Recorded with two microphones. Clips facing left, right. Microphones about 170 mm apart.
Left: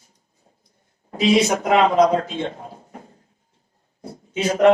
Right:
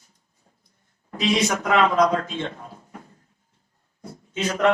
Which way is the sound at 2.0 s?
35° left (ahead or behind).